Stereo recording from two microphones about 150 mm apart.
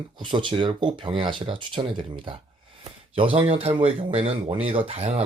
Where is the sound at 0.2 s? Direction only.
30° right (ahead or behind).